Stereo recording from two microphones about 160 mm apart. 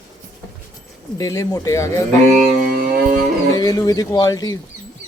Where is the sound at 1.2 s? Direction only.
20° left (ahead or behind).